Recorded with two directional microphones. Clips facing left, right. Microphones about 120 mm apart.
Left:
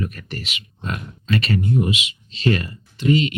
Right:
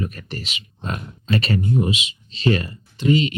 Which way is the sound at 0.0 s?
35° right (ahead or behind).